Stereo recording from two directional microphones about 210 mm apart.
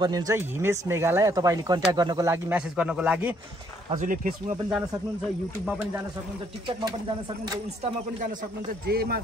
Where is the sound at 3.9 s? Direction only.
40° right (ahead or behind).